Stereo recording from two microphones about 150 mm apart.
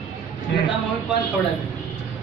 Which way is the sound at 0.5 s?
90° left.